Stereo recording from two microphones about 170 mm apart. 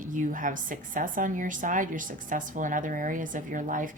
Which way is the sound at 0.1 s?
50° right (ahead or behind).